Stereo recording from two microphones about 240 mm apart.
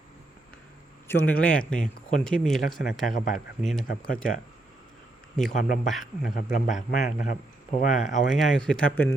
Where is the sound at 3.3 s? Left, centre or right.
Centre.